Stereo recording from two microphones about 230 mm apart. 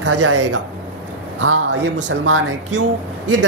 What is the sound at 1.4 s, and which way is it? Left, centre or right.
Speech, right.